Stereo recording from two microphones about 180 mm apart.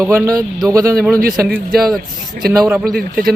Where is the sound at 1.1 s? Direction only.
55° right (ahead or behind).